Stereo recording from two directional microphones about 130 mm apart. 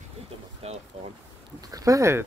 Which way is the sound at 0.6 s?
50° right (ahead or behind).